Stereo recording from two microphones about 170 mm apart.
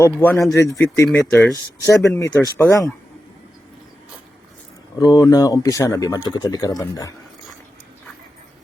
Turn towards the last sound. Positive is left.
turn(degrees=20)  # may be behind; listen again after turning